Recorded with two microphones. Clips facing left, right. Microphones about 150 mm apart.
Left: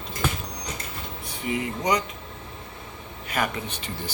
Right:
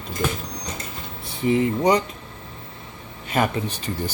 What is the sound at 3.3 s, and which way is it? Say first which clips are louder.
Speech: right 5 dB; 30° right (ahead or behind).